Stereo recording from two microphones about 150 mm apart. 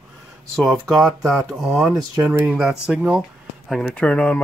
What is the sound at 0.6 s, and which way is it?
Speech, centre (ahead or behind).